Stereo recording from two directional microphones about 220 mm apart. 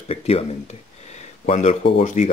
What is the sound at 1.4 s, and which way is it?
Speech, 30° left (ahead or behind).